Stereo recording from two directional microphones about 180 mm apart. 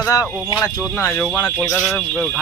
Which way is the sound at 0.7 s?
Centre (ahead or behind).